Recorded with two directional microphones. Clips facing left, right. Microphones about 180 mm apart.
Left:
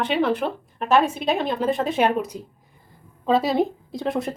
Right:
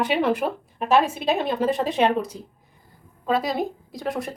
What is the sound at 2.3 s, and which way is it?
Speech, 20° left (ahead or behind).